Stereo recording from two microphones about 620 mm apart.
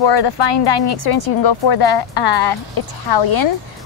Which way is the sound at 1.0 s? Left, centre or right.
Left.